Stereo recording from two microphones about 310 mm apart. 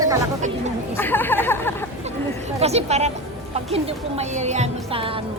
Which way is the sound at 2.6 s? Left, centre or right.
Centre.